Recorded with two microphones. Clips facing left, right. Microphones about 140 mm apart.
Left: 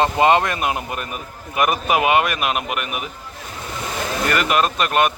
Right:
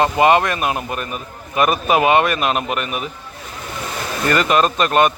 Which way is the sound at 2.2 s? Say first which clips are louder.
Right 4 dB; 10° left (ahead or behind).